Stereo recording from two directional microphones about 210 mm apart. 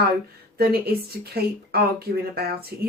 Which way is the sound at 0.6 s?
50° right (ahead or behind).